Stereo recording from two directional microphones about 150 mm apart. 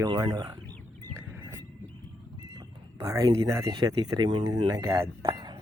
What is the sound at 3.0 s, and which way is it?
Speech, 25° right (ahead or behind).